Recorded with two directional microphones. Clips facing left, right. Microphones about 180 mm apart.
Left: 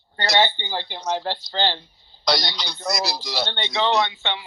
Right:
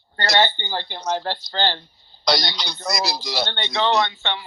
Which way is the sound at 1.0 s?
45° right (ahead or behind).